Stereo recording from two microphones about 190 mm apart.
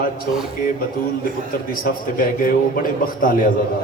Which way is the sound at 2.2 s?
45° left (ahead or behind).